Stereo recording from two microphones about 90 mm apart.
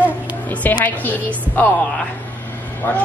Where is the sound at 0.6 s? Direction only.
20° left (ahead or behind).